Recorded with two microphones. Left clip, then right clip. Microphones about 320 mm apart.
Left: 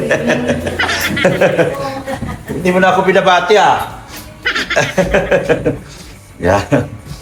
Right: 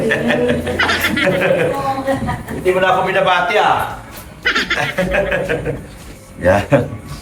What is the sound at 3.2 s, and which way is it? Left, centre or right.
Speech, centre.